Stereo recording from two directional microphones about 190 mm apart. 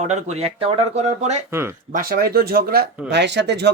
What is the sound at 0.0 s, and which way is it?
Speech, 35° right (ahead or behind).